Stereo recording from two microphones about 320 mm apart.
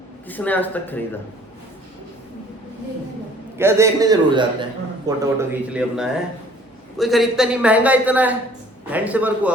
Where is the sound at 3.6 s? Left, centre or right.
Centre.